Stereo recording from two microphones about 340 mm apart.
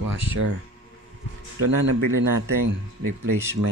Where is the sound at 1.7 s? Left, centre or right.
Right.